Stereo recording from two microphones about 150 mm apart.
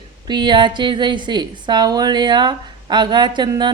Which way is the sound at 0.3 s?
30° right (ahead or behind).